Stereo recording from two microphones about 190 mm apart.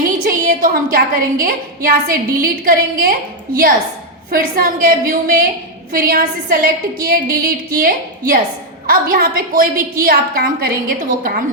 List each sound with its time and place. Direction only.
0.3 s a woman's voice: 50° right (ahead or behind)